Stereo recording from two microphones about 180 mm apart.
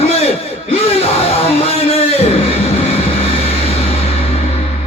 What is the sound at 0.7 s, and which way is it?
Music, 35° left (ahead or behind).